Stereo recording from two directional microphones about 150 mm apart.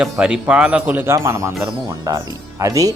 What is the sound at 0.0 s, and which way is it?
Speech, 5° right (ahead or behind).